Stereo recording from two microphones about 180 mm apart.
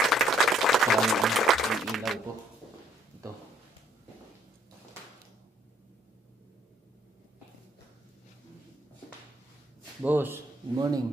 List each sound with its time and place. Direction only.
0.1 s applause: centre (ahead or behind)
10.0 s a man's voice: 10° right (ahead or behind)